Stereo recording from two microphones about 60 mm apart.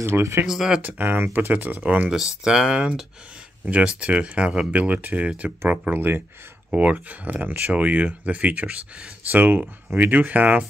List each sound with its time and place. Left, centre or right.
0.0 s speech: right
0.5 s speech: centre
0.8 s speech: right
2.4 s speech: centre
9.3 s speech: right